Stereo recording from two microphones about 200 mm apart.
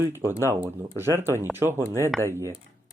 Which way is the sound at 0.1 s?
10° right (ahead or behind).